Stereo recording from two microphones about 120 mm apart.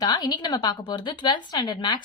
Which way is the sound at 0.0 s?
35° left (ahead or behind).